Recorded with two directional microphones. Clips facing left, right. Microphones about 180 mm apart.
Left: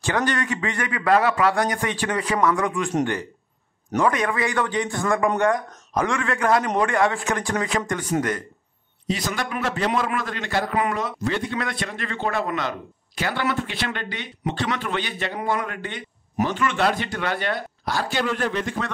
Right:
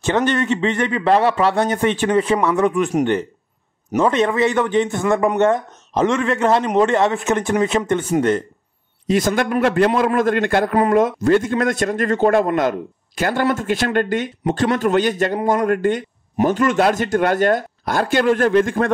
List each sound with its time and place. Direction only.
0.0 s a man's voice: 25° right (ahead or behind)
4.0 s a man's voice: 25° right (ahead or behind)
9.0 s a man's voice: 50° right (ahead or behind)